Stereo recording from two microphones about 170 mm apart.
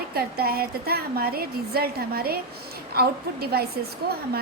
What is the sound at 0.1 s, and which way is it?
A woman's voice, 65° right (ahead or behind).